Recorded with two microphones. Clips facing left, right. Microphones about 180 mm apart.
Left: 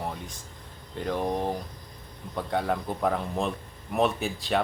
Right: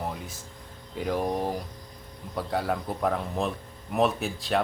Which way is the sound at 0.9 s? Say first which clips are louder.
Right 1 dB; 5° right (ahead or behind).